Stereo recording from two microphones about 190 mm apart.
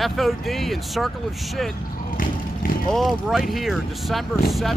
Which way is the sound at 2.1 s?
45° left (ahead or behind).